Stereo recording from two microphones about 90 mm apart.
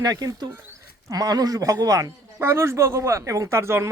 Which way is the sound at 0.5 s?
30° right (ahead or behind).